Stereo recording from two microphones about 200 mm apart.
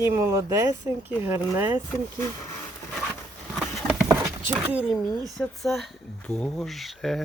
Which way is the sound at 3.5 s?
5° right (ahead or behind).